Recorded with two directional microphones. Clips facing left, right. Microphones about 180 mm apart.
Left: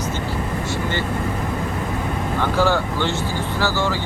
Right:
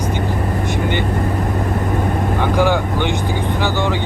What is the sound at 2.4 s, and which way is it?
Speech, 15° right (ahead or behind).